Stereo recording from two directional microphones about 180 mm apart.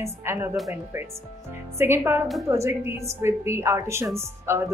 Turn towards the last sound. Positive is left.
turn(degrees=-15)  # may be behind; listen again after turning